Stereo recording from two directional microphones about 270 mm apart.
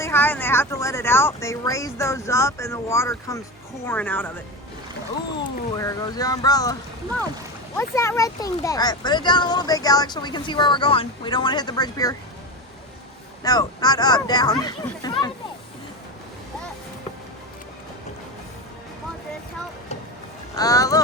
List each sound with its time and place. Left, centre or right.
0.0 s speech: centre
5.4 s speech: centre
7.8 s speech: centre
13.4 s speech: centre
20.6 s speech: centre